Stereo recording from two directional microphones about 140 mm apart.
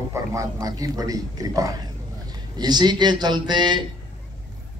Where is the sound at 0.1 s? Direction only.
25° right (ahead or behind).